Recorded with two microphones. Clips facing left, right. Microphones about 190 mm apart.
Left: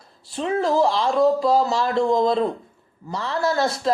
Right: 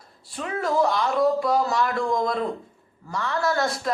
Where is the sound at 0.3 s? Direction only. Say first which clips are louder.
Left 5 dB; 25° left (ahead or behind).